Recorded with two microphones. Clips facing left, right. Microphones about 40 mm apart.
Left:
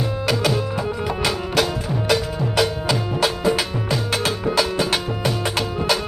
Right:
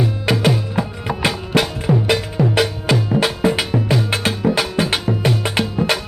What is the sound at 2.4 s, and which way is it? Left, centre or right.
Music, right.